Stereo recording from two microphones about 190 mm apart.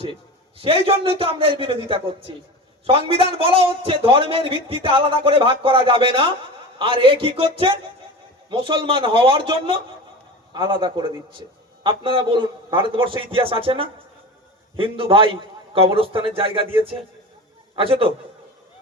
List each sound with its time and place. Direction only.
0.6 s a man's voice: 30° right (ahead or behind)